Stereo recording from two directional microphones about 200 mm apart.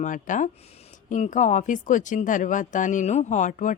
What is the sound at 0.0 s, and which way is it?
Speech, 40° left (ahead or behind).